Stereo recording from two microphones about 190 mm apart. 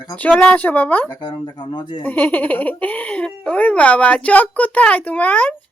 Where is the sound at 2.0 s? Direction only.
10° left (ahead or behind).